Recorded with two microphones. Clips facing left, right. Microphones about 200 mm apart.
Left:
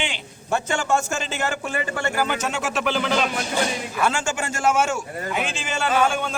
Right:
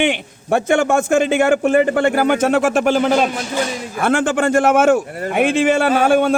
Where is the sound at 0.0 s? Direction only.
55° right (ahead or behind).